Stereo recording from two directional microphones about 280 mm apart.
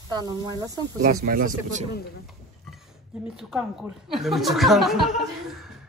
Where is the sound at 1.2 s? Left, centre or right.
Right.